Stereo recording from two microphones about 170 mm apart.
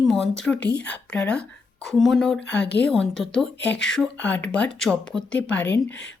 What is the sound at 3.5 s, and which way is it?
Speech, 90° left.